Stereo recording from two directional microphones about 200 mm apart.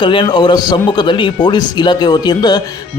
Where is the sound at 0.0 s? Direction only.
25° left (ahead or behind).